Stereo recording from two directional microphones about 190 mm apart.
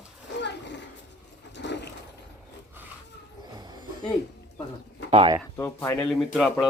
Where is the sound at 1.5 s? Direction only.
65° left (ahead or behind).